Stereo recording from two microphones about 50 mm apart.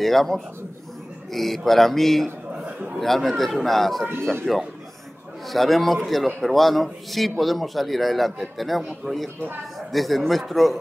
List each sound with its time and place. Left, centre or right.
0.0 s a man's voice: centre
2.5 s a sound: right
3.0 s a man's voice: centre